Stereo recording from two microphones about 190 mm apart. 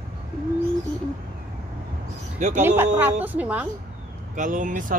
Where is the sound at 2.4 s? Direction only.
40° right (ahead or behind).